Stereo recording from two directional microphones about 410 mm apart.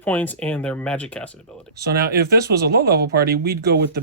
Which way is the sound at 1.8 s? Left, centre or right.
Right.